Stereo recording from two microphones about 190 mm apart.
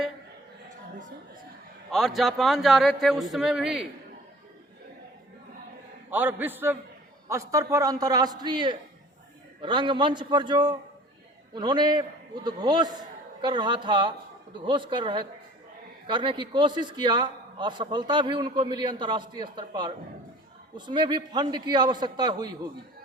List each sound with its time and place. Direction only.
1.9 s speech: centre (ahead or behind)
6.1 s a man's voice: 10° right (ahead or behind)